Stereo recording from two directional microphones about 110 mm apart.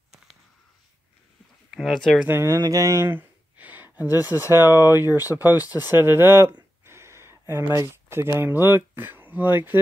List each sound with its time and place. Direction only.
1.7 s speech: centre (ahead or behind)
2.2 s speech: 25° right (ahead or behind)
5.0 s speech: 30° left (ahead or behind)
5.3 s speech: 20° right (ahead or behind)